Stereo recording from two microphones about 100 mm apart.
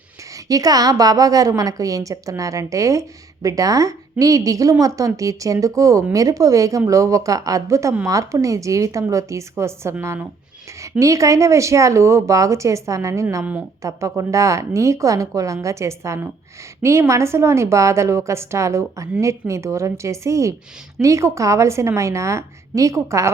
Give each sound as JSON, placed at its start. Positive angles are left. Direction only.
{"t": 0.3, "sound": "a woman's voice", "side_deg": -35}
{"t": 11.0, "sound": "a woman's voice", "side_deg": -30}
{"t": 13.4, "sound": "speech", "side_deg": -15}
{"t": 13.8, "sound": "a woman's voice", "side_deg": -35}